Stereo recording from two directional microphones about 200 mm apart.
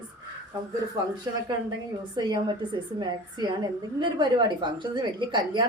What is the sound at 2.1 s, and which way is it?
A woman's voice, 20° right (ahead or behind).